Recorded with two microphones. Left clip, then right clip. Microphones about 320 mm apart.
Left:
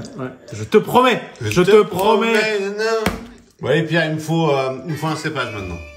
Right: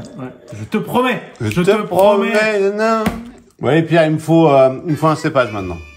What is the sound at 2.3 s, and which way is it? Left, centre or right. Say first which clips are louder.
A man's voice: right 3 dB; centre.